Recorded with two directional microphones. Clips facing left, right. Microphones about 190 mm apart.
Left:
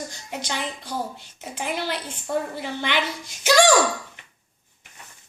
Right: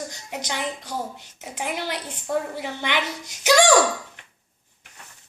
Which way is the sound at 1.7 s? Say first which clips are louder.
Left 1 dB; 15° right (ahead or behind).